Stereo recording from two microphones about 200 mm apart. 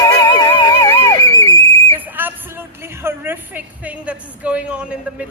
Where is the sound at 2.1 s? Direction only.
10° right (ahead or behind).